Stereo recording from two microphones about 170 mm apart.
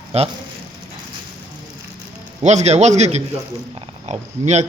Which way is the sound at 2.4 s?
40° right (ahead or behind).